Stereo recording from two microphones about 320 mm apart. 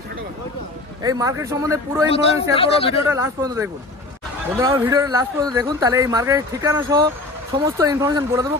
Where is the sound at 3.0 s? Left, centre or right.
Centre.